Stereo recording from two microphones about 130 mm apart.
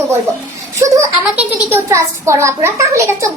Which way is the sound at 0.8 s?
25° right (ahead or behind).